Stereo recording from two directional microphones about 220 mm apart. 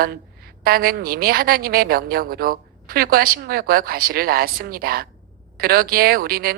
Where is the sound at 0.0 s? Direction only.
45° right (ahead or behind).